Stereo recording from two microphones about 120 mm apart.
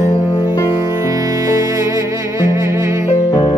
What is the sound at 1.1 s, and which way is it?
Music, 30° right (ahead or behind).